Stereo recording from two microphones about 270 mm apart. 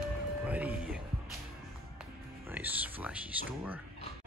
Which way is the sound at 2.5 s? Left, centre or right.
Centre.